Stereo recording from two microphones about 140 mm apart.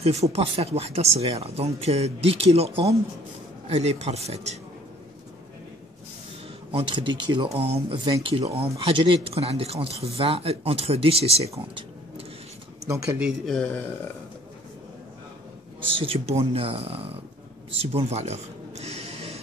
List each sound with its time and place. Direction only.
0.0 s speech: 50° right (ahead or behind)
6.7 s speech: 40° right (ahead or behind)
12.8 s speech: 20° right (ahead or behind)
13.2 s speech: 5° left (ahead or behind)
15.9 s speech: 40° right (ahead or behind)
17.6 s a sound: 45° right (ahead or behind)